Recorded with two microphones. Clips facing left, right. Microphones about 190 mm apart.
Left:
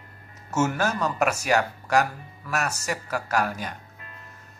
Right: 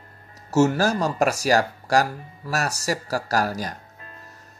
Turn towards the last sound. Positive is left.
turn(degrees=-35)  # may be behind; listen again after turning